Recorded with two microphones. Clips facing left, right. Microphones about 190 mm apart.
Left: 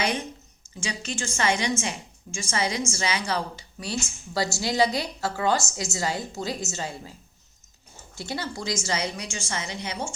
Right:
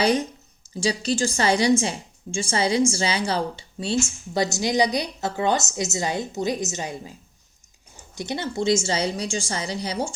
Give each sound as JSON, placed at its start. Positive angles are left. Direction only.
{"t": 0.0, "sound": "a woman's voice", "side_deg": -35}